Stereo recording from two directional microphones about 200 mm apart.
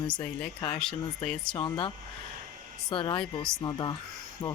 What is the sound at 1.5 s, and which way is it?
Speech, 25° left (ahead or behind).